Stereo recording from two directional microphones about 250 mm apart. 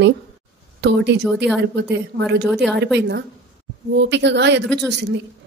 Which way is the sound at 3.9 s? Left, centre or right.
Right.